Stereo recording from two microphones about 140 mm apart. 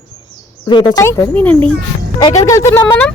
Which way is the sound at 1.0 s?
20° left (ahead or behind).